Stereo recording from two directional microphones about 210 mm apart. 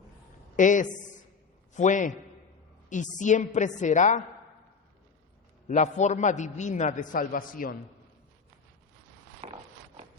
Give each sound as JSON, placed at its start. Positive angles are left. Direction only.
{"t": 0.5, "sound": "a man's voice", "side_deg": 35}
{"t": 5.6, "sound": "a man's voice", "side_deg": 35}